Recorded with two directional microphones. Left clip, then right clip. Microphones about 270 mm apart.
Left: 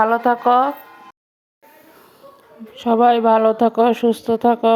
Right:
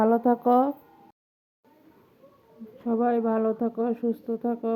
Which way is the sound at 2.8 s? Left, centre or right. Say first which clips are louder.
Left 12 dB; left.